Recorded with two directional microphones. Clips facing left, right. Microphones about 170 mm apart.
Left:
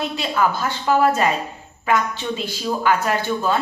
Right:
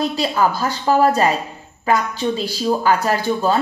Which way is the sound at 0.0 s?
35° right (ahead or behind).